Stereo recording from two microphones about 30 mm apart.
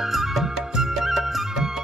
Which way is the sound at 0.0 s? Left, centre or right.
Centre.